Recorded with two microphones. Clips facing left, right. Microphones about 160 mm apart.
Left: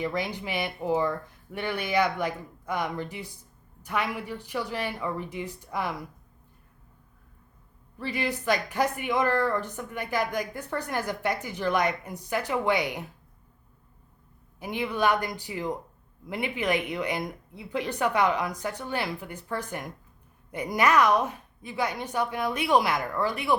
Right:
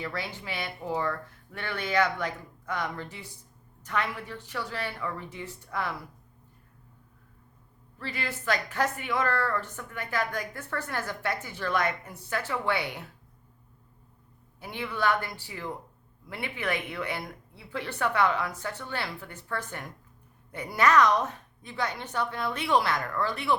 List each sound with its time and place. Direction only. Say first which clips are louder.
0.0 s speech: left 6 dB; 15° left (ahead or behind)
7.9 s speech: left 6 dB; 15° left (ahead or behind)
14.6 s speech: left 3 dB; 15° left (ahead or behind)